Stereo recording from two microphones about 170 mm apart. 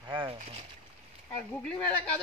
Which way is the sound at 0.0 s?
30° right (ahead or behind).